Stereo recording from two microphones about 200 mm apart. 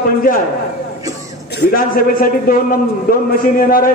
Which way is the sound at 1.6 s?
45° left (ahead or behind).